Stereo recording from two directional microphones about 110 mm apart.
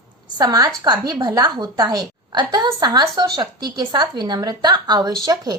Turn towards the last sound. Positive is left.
turn(degrees=-35)  # may be behind; listen again after turning